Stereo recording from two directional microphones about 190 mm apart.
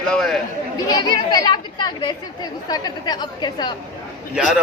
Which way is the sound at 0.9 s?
20° left (ahead or behind).